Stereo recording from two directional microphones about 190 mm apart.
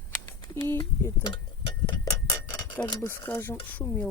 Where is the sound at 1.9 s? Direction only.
15° left (ahead or behind).